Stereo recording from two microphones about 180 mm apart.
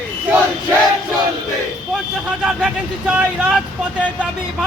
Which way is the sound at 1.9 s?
5° right (ahead or behind).